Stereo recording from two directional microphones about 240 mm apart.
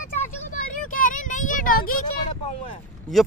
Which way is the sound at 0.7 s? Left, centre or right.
Left.